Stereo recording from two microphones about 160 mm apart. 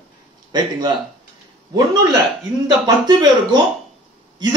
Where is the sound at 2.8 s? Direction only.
25° right (ahead or behind).